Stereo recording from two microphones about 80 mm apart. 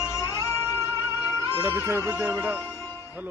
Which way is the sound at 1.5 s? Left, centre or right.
Right.